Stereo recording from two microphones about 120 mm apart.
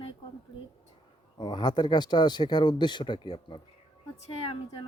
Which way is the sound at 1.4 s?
40° left (ahead or behind).